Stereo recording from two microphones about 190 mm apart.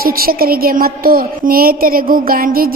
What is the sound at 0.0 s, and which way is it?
A woman's voice, 50° right (ahead or behind).